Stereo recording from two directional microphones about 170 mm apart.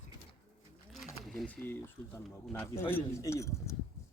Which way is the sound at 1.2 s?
Centre (ahead or behind).